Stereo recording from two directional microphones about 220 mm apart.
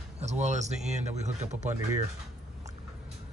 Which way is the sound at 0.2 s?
30° right (ahead or behind).